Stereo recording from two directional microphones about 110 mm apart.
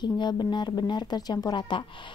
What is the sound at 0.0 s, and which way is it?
Speech, 40° left (ahead or behind).